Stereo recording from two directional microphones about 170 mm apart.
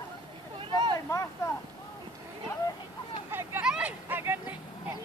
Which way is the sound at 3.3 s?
15° right (ahead or behind).